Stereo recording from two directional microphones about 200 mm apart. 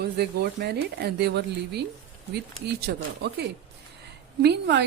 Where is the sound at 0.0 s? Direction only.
55° right (ahead or behind).